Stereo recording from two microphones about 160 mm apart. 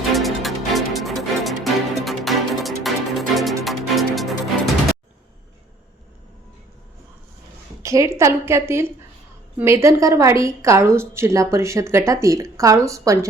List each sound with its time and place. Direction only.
0.1 s music: centre (ahead or behind)
7.8 s a woman's voice: 20° right (ahead or behind)